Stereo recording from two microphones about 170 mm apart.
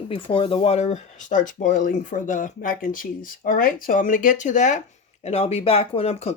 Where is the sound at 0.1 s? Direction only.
30° left (ahead or behind).